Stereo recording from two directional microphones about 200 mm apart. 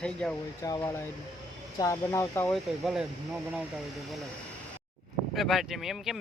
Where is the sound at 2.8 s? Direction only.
5° right (ahead or behind).